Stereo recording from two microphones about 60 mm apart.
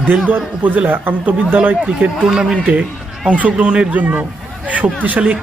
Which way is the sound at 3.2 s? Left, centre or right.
Right.